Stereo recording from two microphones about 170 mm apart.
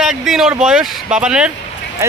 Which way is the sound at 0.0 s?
5° right (ahead or behind).